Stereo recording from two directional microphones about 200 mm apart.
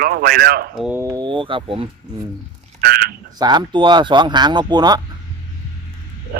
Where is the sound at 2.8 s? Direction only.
50° right (ahead or behind).